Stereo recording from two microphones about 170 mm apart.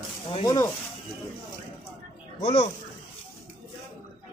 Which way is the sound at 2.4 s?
40° left (ahead or behind).